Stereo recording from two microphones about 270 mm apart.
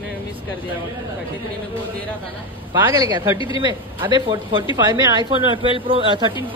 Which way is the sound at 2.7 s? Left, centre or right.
Centre.